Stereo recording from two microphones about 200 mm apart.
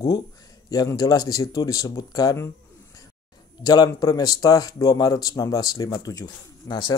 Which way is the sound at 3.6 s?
20° left (ahead or behind).